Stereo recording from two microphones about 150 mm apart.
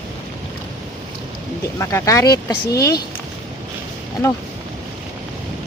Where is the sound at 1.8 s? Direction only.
20° left (ahead or behind).